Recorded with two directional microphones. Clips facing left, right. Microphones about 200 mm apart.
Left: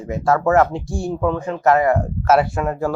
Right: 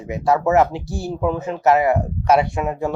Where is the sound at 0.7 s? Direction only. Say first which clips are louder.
Left 2 dB; 5° right (ahead or behind).